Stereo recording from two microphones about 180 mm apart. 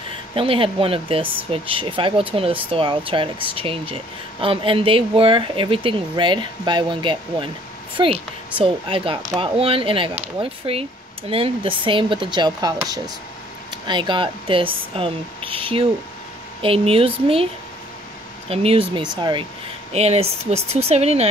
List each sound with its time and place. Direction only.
0.3 s speech: 30° right (ahead or behind)
9.6 s speech: 30° right (ahead or behind)
18.5 s speech: 30° right (ahead or behind)
19.9 s speech: 35° right (ahead or behind)